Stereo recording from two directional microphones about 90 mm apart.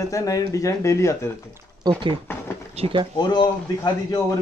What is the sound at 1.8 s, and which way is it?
Speech, 50° right (ahead or behind).